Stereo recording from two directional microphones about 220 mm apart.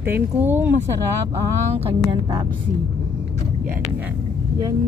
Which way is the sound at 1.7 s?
25° right (ahead or behind).